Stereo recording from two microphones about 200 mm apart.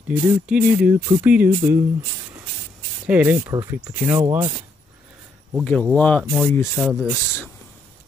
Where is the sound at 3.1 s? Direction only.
10° right (ahead or behind).